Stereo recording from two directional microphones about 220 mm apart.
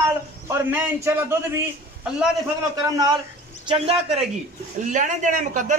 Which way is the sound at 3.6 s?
25° right (ahead or behind).